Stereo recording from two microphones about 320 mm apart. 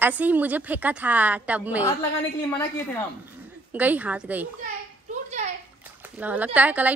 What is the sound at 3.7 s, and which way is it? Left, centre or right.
Speech, centre.